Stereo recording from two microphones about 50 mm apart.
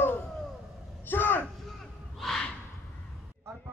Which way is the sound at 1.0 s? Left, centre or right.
Left.